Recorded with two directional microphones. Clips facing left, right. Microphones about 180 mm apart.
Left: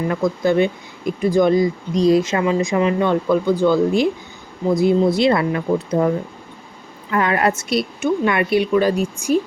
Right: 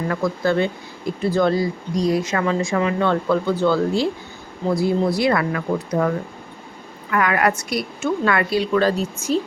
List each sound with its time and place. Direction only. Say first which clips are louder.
0.1 s a woman's voice: left 2 dB; 20° left (ahead or behind)